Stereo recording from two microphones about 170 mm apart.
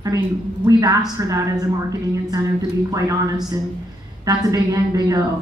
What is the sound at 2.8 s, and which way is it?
A woman's voice, 20° right (ahead or behind).